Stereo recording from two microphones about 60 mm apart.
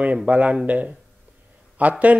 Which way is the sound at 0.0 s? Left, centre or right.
Right.